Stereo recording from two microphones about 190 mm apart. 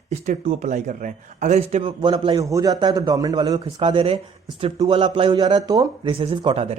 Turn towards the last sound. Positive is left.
turn(degrees=-30)  # may be behind; listen again after turning